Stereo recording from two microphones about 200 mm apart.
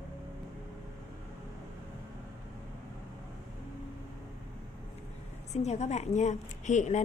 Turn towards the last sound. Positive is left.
turn(degrees=35)  # may be behind; listen again after turning